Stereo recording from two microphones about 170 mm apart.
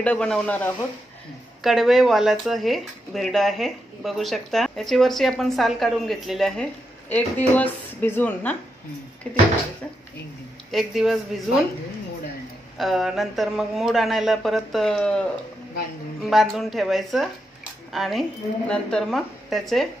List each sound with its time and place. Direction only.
0.0 s speech: 5° left (ahead or behind)
1.6 s speech: centre (ahead or behind)
10.7 s speech: centre (ahead or behind)
12.7 s speech: centre (ahead or behind)